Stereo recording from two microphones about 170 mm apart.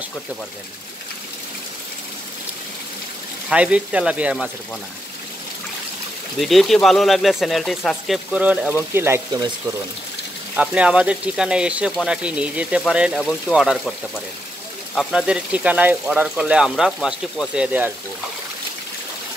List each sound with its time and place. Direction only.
3.4 s speech: 5° right (ahead or behind)
6.4 s speech: centre (ahead or behind); by 9.4 s 15° right (ahead or behind)
10.5 s speech: 5° right (ahead or behind)
15.0 s speech: centre (ahead or behind)